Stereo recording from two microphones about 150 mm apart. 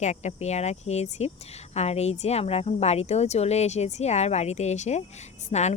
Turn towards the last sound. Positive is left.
turn(degrees=50)  # may be behind; listen again after turning